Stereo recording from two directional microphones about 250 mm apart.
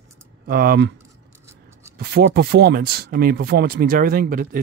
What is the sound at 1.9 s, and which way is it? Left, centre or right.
Speech, right.